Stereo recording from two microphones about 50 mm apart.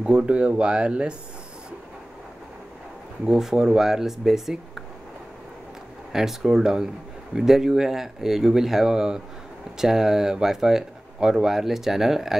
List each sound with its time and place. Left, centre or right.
0.0 s speech: centre
3.3 s speech: centre
6.1 s speech: centre